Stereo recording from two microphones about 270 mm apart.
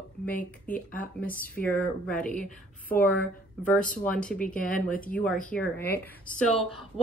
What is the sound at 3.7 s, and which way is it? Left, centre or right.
A woman's voice, left.